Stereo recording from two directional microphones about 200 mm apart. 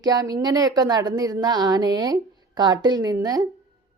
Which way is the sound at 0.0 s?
20° right (ahead or behind).